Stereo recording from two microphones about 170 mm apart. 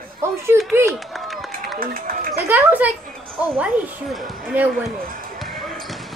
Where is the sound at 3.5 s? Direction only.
10° right (ahead or behind).